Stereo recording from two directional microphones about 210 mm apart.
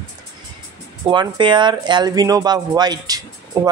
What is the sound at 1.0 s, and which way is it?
Speech, 20° right (ahead or behind).